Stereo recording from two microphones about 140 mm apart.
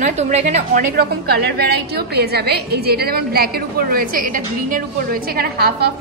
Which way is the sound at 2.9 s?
90° right.